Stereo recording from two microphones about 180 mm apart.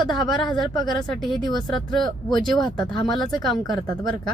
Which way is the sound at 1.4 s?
25° left (ahead or behind).